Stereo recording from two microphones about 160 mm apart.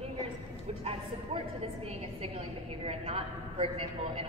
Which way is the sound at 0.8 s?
40° right (ahead or behind).